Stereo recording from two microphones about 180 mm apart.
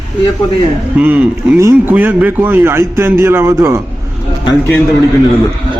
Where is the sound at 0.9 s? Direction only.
10° right (ahead or behind).